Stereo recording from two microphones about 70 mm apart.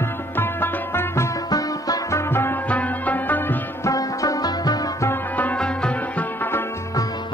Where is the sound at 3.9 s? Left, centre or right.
Left.